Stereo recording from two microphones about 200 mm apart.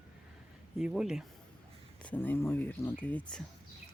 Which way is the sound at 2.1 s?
10° left (ahead or behind).